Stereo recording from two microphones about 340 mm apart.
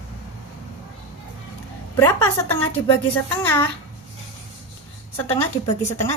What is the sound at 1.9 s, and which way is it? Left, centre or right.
A woman's voice, centre.